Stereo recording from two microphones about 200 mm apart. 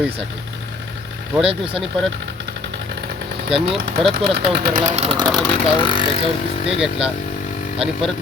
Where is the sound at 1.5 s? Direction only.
25° right (ahead or behind).